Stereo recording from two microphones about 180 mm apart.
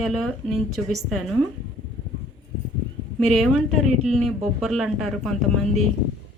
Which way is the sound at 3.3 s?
Centre (ahead or behind).